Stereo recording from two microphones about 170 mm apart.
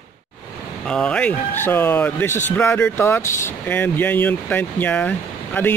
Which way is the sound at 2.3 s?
45° left (ahead or behind).